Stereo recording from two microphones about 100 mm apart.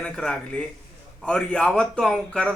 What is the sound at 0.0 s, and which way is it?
Speech, 10° left (ahead or behind).